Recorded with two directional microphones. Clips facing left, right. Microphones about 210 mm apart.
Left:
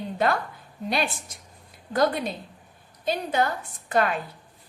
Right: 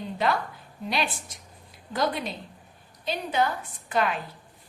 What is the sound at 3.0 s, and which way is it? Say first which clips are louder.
A woman's voice: left 2 dB; 45° left (ahead or behind).